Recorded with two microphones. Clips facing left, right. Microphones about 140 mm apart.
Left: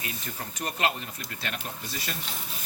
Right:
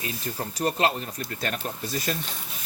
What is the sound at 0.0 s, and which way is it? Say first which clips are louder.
Speech: right 5 dB; 30° right (ahead or behind).